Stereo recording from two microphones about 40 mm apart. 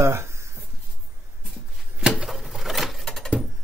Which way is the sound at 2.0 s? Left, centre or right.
Centre.